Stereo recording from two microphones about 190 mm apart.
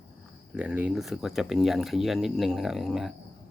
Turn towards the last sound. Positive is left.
turn(degrees=0)  # may be behind; listen again after turning